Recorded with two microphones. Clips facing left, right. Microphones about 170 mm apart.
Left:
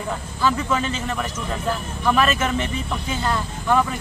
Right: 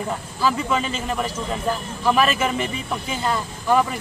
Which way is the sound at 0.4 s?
5° right (ahead or behind).